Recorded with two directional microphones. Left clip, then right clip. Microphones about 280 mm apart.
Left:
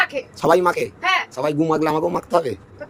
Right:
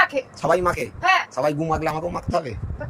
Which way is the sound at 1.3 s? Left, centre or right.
Centre.